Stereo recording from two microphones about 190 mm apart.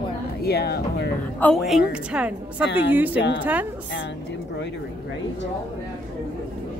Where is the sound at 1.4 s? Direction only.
Centre (ahead or behind).